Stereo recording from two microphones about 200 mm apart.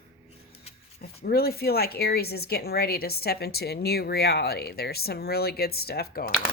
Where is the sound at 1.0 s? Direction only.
50° left (ahead or behind).